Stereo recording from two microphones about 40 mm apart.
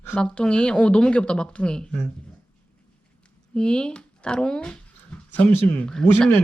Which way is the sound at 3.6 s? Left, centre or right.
Left.